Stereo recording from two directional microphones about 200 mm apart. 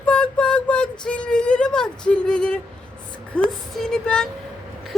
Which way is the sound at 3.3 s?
5° left (ahead or behind).